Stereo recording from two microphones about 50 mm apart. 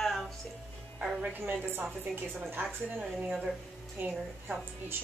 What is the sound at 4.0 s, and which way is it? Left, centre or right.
Speech, right.